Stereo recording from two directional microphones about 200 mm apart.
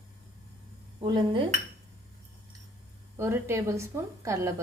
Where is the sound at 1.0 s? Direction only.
25° right (ahead or behind).